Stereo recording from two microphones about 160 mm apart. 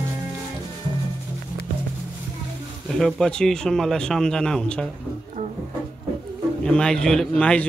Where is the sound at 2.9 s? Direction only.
Centre (ahead or behind).